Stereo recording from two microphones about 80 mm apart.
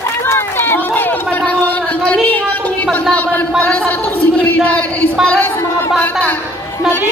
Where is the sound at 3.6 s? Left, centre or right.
Centre.